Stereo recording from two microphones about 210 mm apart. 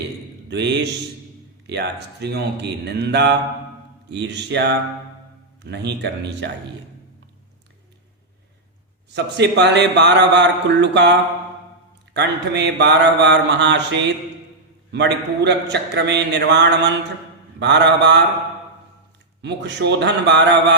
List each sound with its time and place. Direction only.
0.5 s a man's voice: 55° right (ahead or behind)
5.6 s a man's voice: 55° right (ahead or behind)
9.1 s a man's voice: 55° right (ahead or behind)
19.4 s a man's voice: 55° right (ahead or behind)